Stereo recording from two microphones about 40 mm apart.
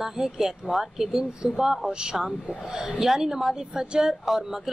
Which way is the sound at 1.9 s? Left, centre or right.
Right.